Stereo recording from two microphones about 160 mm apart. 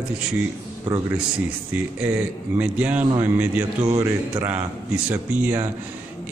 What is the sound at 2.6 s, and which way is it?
A man's voice, 10° right (ahead or behind).